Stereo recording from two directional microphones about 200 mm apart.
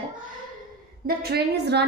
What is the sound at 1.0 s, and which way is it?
Speech, 55° right (ahead or behind).